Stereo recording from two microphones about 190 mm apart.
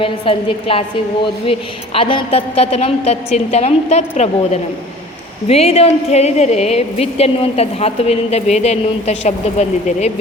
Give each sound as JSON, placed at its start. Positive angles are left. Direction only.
{"t": 0.0, "sound": "a woman's voice", "side_deg": 30}